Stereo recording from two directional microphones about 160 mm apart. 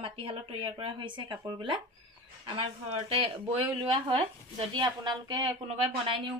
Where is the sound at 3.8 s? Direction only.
35° right (ahead or behind).